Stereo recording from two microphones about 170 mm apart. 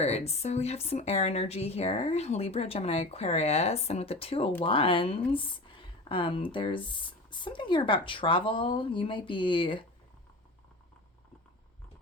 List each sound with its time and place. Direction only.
0.0 s speech: 40° left (ahead or behind)